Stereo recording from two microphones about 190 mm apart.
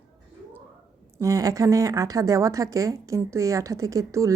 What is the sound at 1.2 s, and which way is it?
A woman's voice, 15° right (ahead or behind).